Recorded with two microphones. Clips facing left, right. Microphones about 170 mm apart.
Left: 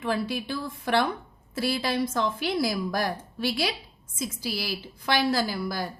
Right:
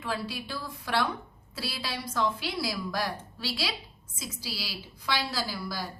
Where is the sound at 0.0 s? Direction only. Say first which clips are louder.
Left 6 dB; 55° left (ahead or behind).